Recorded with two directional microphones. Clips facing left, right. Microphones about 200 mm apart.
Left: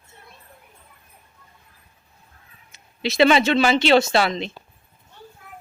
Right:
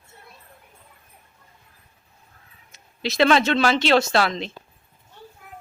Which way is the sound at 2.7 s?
Centre (ahead or behind).